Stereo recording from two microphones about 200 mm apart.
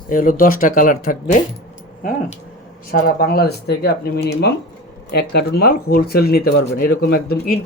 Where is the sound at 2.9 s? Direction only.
50° left (ahead or behind).